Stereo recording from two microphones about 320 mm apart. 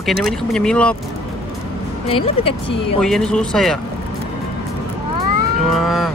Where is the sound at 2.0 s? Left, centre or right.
Centre.